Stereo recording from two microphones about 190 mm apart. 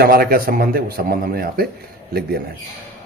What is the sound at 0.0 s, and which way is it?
A man's voice, 50° right (ahead or behind).